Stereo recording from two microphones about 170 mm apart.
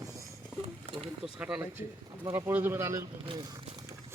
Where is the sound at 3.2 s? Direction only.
30° right (ahead or behind).